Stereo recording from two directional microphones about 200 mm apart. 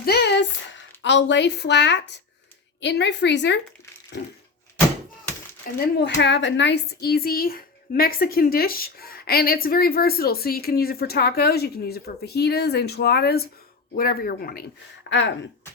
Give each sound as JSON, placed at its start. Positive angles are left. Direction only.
{"t": 0.0, "sound": "a woman's voice", "side_deg": 55}
{"t": 5.7, "sound": "speech", "side_deg": 45}
{"t": 6.0, "sound": "speech", "side_deg": 60}